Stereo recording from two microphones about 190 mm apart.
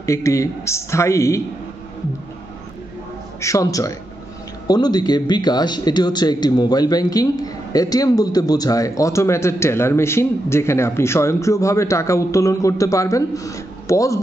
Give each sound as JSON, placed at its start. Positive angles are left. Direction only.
{"t": 0.0, "sound": "speech", "side_deg": 15}
{"t": 3.3, "sound": "speech", "side_deg": 15}